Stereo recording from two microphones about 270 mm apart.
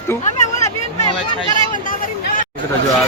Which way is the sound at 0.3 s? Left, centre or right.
Left.